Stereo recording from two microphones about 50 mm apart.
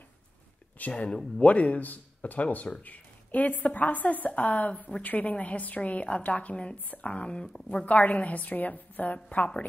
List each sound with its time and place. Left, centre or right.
0.7 s a woman's voice: left